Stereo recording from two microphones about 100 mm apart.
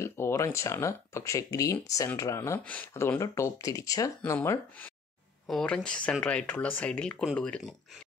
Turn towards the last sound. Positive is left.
turn(degrees=10)  # may be behind; listen again after turning